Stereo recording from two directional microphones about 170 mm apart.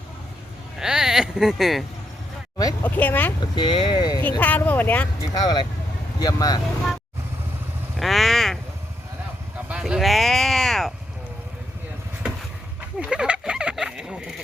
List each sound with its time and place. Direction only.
0.8 s speech: 5° right (ahead or behind)
2.8 s speech: 10° left (ahead or behind)
3.4 s speech: 25° left (ahead or behind)
4.2 s speech: 10° left (ahead or behind)
5.3 s speech: 25° left (ahead or behind)
7.9 s vehicle: centre (ahead or behind)
9.6 s a sound: 5° right (ahead or behind)
13.0 s fowl: 5° right (ahead or behind)